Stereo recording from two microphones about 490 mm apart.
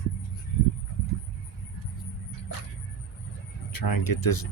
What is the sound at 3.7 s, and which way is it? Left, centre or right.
Speech, left.